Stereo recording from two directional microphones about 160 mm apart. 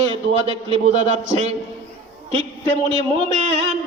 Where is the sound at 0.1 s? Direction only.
35° right (ahead or behind).